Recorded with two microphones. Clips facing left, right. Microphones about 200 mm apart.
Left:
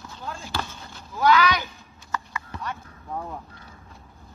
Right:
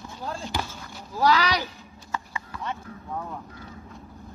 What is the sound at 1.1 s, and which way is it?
Sheep, 35° right (ahead or behind).